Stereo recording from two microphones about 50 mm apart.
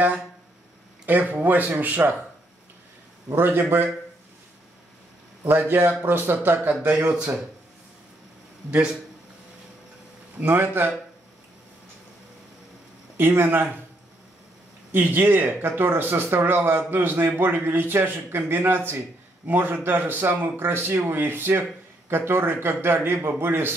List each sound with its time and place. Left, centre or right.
1.0 s speech: right
3.3 s speech: right
5.5 s speech: right
6.9 s speech: right
10.4 s speech: right
13.2 s speech: right
14.9 s speech: right